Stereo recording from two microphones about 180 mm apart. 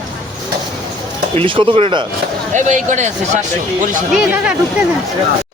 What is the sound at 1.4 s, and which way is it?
Speech, 30° right (ahead or behind).